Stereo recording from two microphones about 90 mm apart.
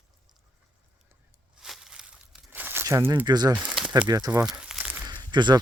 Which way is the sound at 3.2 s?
50° right (ahead or behind).